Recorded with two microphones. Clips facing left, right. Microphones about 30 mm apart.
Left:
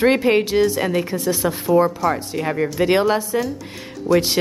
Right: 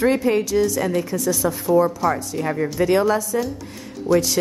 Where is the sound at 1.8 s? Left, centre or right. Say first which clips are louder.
Left 1 dB; left.